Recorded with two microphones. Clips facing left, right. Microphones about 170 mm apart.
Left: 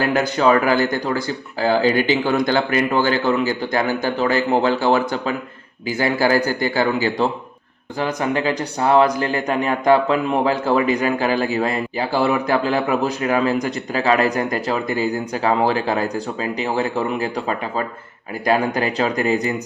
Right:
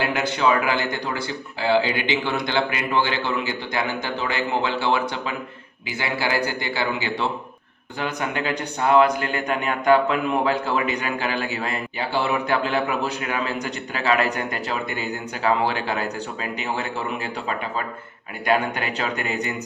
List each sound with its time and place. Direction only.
0.0 s a man's voice: 40° left (ahead or behind)